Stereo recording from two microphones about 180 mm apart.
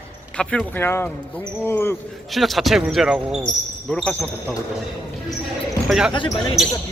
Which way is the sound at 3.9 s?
5° left (ahead or behind).